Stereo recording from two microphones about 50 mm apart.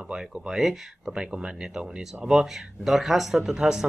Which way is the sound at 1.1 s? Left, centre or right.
Centre.